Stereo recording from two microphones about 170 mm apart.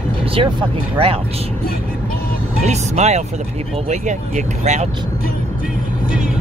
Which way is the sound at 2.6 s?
40° right (ahead or behind).